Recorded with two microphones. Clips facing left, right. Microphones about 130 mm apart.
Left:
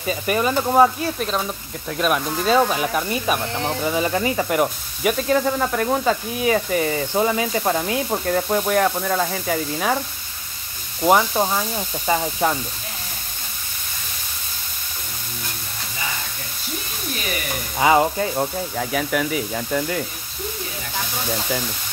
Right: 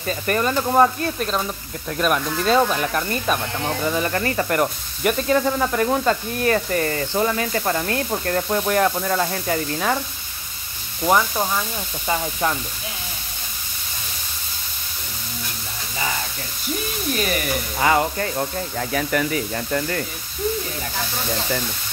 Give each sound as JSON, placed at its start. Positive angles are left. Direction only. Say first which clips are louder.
{"t": 0.0, "sound": "speech", "louder": "left 1 dB", "side_deg": 10}
{"t": 11.0, "sound": "speech", "louder": "left 2 dB", "side_deg": 20}
{"t": 17.7, "sound": "speech", "louder": "left 3 dB", "side_deg": 20}